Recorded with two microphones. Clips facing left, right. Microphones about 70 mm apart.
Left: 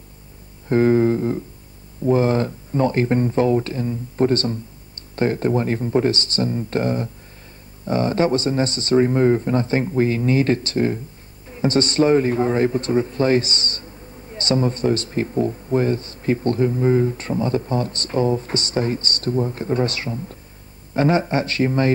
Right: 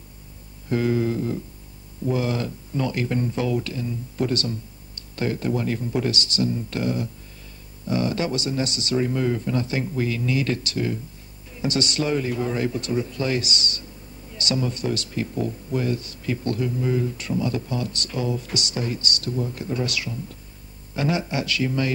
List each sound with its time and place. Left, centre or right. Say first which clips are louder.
0.7 s a man's voice: left 7 dB; left